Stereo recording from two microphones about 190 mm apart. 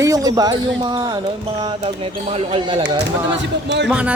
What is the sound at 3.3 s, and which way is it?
Speech, 70° right (ahead or behind).